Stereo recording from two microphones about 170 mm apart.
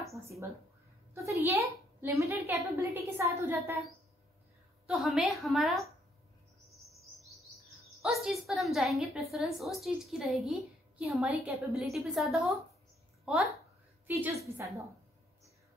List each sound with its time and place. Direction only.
0.2 s a woman's voice: 15° right (ahead or behind)
4.8 s a woman's voice: centre (ahead or behind)
6.7 s bird: centre (ahead or behind)
7.7 s a woman's voice: centre (ahead or behind); by 14.9 s 15° right (ahead or behind)